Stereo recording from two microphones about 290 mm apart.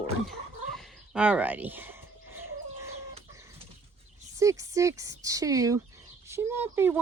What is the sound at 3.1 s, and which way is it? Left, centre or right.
Chicken, centre.